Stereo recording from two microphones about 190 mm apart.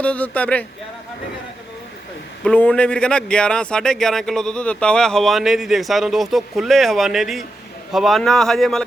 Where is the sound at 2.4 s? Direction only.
5° left (ahead or behind).